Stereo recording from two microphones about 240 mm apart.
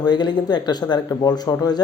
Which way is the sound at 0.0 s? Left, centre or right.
Centre.